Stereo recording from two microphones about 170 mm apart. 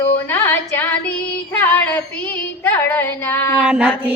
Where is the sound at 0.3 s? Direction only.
10° left (ahead or behind).